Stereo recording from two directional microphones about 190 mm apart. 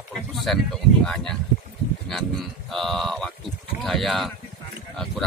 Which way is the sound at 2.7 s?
Centre (ahead or behind).